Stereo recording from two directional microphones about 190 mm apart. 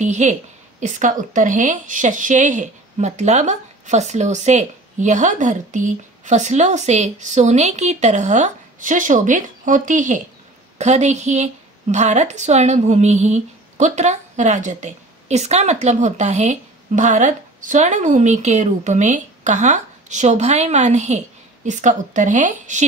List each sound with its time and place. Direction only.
0.0 s a woman's voice: 40° right (ahead or behind)